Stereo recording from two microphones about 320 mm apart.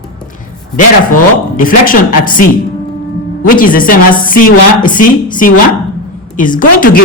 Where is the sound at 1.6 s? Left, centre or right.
Left.